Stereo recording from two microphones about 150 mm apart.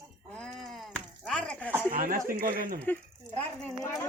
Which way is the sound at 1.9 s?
70° right (ahead or behind).